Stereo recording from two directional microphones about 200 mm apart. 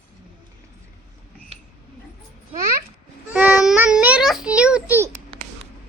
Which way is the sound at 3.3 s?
5° right (ahead or behind).